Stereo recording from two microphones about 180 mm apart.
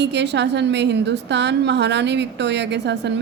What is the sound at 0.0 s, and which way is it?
A woman's voice, 75° right (ahead or behind).